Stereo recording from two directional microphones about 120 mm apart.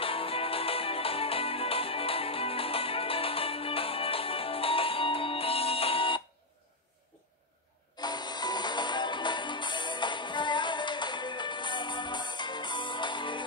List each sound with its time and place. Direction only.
0.0 s music: 50° left (ahead or behind)
8.0 s music: 35° left (ahead or behind)